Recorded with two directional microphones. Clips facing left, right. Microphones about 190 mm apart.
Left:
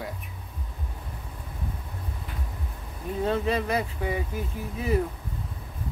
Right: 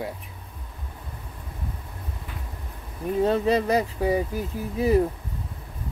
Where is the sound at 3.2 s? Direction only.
40° right (ahead or behind).